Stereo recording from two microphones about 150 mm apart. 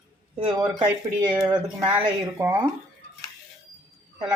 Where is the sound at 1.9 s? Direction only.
10° right (ahead or behind).